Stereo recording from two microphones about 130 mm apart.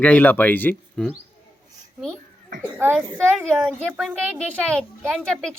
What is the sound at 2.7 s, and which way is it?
Speech, 15° right (ahead or behind).